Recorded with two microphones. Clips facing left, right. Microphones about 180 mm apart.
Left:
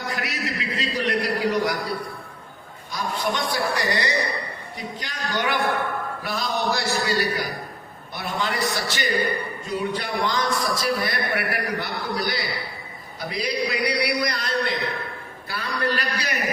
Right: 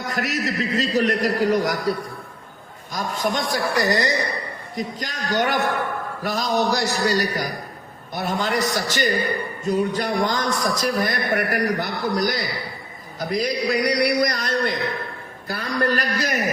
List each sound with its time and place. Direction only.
0.1 s a man's voice: 45° right (ahead or behind)
2.9 s a man's voice: 45° right (ahead or behind)